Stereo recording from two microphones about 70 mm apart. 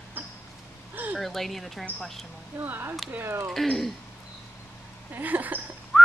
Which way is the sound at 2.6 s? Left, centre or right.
Right.